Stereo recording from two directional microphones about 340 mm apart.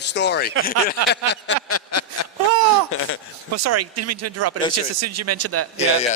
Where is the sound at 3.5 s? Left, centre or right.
Right.